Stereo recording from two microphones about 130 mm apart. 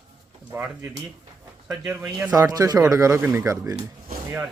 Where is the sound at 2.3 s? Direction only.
30° right (ahead or behind).